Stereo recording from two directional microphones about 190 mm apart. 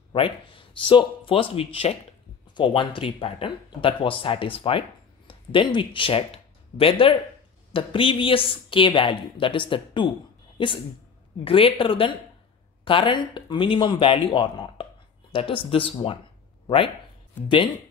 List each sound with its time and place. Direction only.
0.1 s a woman's voice: 25° left (ahead or behind)
11.4 s a woman's voice: 30° left (ahead or behind)